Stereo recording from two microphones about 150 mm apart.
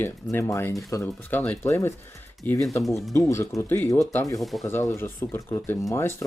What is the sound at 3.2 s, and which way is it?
Speech, 20° left (ahead or behind).